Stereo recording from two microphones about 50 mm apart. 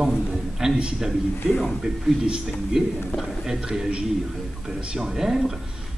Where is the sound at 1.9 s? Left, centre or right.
Centre.